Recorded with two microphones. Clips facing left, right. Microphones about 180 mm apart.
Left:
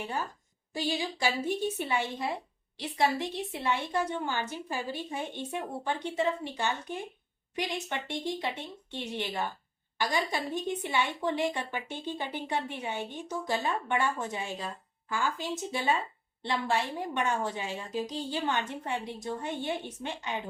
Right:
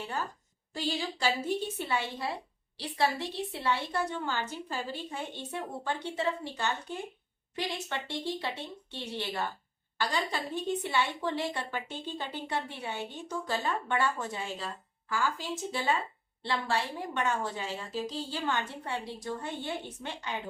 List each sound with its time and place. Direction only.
0.7 s a woman's voice: 15° left (ahead or behind)